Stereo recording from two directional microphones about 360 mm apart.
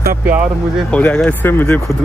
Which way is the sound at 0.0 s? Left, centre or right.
Right.